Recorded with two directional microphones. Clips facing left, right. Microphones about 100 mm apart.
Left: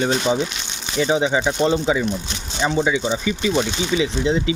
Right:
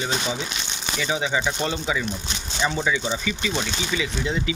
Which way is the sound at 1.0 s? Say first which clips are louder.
Left 7 dB; 30° left (ahead or behind).